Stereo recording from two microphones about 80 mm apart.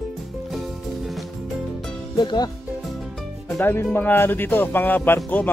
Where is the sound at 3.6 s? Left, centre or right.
Left.